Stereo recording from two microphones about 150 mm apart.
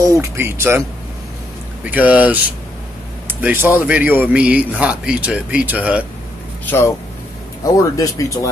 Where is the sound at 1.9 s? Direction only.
10° right (ahead or behind).